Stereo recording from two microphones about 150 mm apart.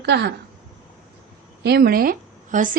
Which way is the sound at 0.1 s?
90° right.